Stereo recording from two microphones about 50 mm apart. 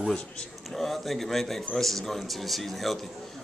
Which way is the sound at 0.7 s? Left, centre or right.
Centre.